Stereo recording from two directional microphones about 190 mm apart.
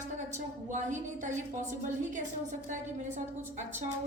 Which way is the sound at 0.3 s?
40° right (ahead or behind).